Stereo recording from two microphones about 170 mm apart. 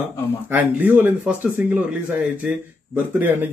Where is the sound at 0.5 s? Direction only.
10° right (ahead or behind).